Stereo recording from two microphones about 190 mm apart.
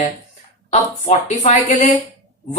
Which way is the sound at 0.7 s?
40° left (ahead or behind).